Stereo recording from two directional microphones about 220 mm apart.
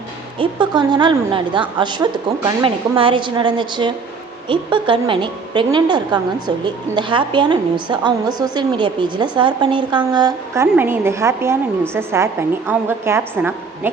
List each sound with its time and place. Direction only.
0.3 s a woman's voice: 20° right (ahead or behind)